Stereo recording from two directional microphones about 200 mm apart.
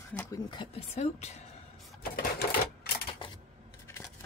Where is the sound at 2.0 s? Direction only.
50° left (ahead or behind).